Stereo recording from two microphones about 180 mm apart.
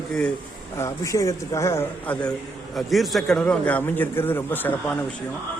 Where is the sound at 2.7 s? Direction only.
Centre (ahead or behind).